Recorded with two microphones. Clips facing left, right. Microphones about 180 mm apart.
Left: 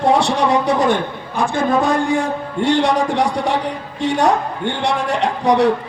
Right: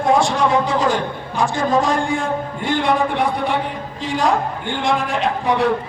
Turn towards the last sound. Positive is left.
turn(degrees=75)  # may be behind; listen again after turning